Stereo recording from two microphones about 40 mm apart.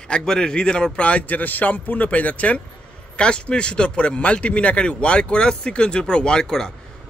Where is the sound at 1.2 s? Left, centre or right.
Left.